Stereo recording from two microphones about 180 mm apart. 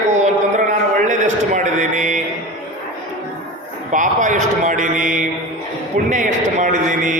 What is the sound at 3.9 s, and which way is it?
A man's voice, 45° right (ahead or behind).